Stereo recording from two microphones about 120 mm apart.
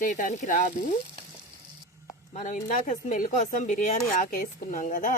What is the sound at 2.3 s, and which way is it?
Speech, 90° left.